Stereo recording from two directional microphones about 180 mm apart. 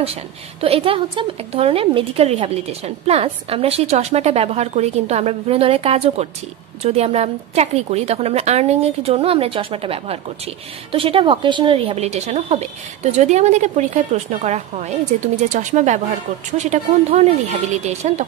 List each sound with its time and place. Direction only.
0.0 s speech: 35° right (ahead or behind)